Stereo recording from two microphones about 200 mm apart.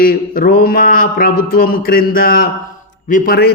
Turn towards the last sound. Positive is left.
turn(degrees=50)  # may be behind; listen again after turning